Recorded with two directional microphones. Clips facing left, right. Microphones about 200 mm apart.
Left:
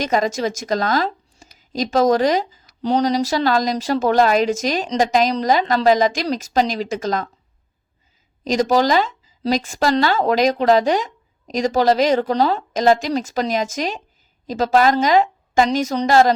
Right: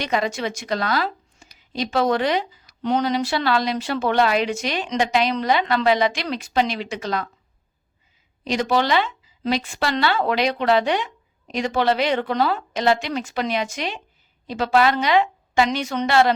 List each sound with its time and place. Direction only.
0.0 s speech: 40° left (ahead or behind)
8.4 s speech: 40° left (ahead or behind)